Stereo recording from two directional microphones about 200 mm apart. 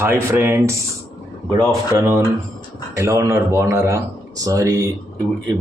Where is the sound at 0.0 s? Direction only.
15° right (ahead or behind).